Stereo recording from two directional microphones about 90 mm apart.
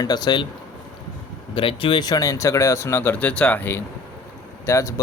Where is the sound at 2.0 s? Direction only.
45° left (ahead or behind); by 3.8 s 20° left (ahead or behind).